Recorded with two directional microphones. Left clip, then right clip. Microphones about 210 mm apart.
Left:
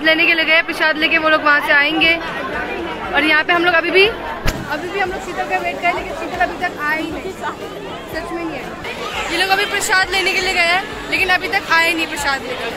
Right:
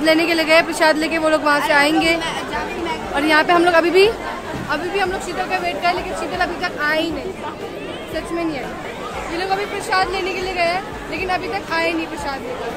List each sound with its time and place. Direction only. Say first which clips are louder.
0.0 s a woman's voice: left 3 dB; 20° right (ahead or behind)
3.2 s a woman's voice: left 1 dB; 20° right (ahead or behind)
6.4 s a woman's voice: left 2 dB; 5° right (ahead or behind)
9.4 s a woman's voice: left 6 dB; 5° left (ahead or behind)